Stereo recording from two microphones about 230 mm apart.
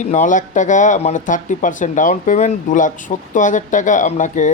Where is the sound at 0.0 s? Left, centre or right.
Left.